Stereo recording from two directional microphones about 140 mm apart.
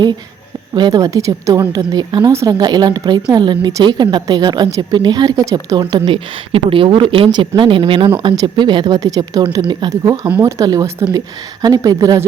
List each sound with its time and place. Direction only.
0.7 s a woman's voice: 30° right (ahead or behind)
5.8 s a woman's voice: 40° right (ahead or behind)
9.9 s a woman's voice: 20° right (ahead or behind)